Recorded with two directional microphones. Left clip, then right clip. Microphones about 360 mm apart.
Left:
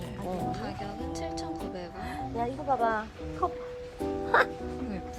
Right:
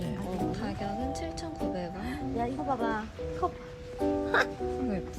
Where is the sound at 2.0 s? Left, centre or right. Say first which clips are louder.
Left 2 dB; left.